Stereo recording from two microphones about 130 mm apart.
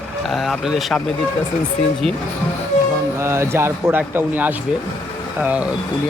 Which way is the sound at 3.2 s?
20° right (ahead or behind).